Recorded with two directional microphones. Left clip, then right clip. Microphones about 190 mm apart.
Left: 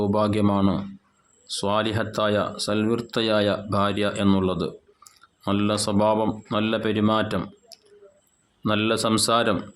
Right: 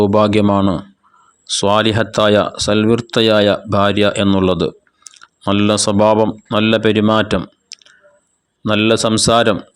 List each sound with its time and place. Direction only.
0.0 s speech: 35° right (ahead or behind)
7.7 s squish: 35° right (ahead or behind)
8.6 s speech: 30° right (ahead or behind)